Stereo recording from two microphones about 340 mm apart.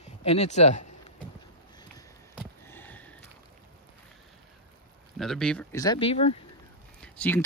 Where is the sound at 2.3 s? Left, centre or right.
Centre.